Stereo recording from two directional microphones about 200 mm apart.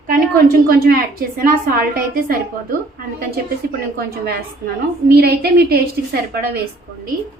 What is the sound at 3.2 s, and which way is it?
A woman's voice, 50° right (ahead or behind).